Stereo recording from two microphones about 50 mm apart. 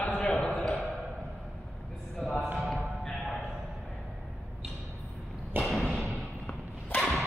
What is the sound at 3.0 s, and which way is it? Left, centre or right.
Music, centre.